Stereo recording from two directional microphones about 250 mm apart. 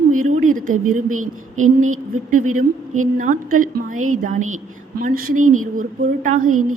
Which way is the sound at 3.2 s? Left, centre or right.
Right.